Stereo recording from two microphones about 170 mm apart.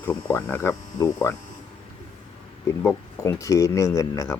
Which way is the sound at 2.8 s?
15° left (ahead or behind).